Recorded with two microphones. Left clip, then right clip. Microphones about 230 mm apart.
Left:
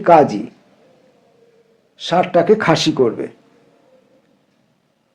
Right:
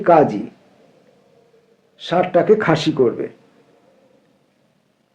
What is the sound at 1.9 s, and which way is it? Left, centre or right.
Speech, left.